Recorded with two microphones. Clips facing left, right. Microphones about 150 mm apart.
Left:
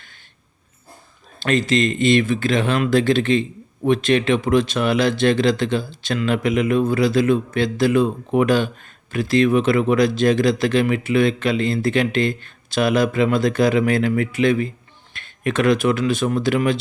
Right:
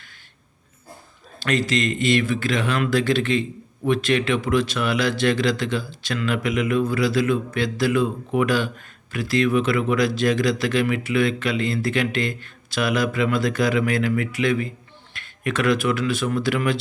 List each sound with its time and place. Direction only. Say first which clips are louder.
1.4 s speech: left 4 dB; 25° left (ahead or behind)